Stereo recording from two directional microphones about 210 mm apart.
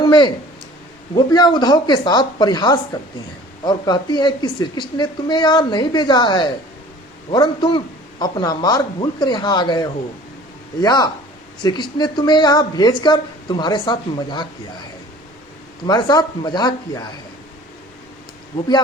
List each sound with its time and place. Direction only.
0.0 s a woman's voice: 20° left (ahead or behind)
15.9 s a woman's voice: 20° left (ahead or behind)